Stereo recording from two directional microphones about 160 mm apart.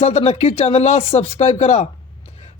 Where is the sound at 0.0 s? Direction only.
40° left (ahead or behind).